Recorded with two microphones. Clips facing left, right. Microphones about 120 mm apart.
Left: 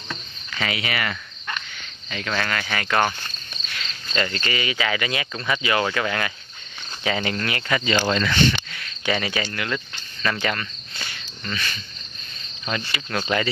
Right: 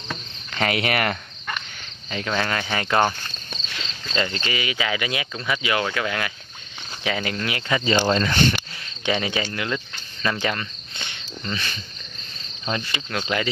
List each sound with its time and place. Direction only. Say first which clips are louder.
0.6 s cricket: right 4 dB; 50° right (ahead or behind)
2.0 s speech: right 2 dB; 25° right (ahead or behind)
8.1 s speech: right 1 dB; 35° right (ahead or behind)
8.7 s cricket: right 1 dB; 25° right (ahead or behind)
12.7 s speech: right 1 dB; 30° right (ahead or behind)
13.1 s speech: left 2 dB; 5° right (ahead or behind)